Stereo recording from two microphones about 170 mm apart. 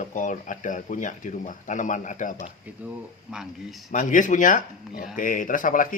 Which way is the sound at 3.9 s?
50° left (ahead or behind).